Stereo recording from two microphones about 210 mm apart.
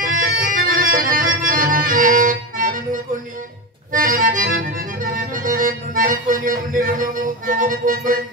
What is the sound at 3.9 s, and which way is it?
Accordion, 40° right (ahead or behind).